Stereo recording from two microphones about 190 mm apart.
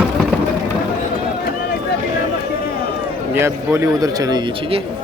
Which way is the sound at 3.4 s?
15° right (ahead or behind).